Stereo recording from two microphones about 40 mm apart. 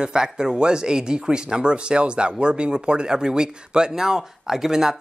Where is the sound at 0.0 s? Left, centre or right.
Centre.